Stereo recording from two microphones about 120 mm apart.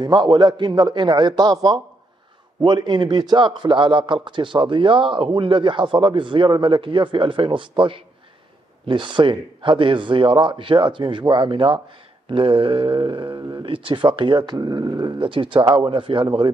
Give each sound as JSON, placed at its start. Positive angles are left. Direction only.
{"t": 0.0, "sound": "a man's voice", "side_deg": -40}